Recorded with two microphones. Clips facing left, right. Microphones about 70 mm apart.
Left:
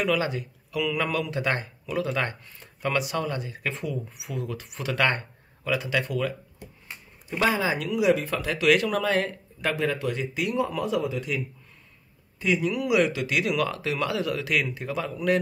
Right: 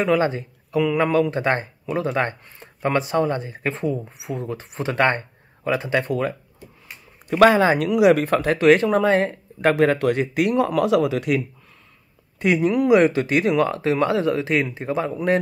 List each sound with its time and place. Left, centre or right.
0.0 s speech: right
7.2 s speech: right
9.8 s speech: right
12.4 s speech: right